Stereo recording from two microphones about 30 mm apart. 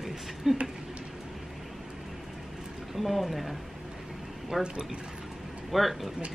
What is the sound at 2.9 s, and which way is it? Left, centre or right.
Speech, centre.